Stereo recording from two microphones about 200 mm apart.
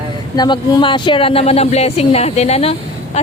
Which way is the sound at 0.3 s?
20° left (ahead or behind).